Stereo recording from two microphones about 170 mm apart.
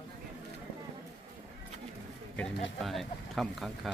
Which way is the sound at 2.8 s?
Centre (ahead or behind).